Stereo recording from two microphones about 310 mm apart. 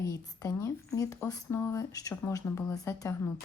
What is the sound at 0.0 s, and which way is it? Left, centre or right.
Speech, centre.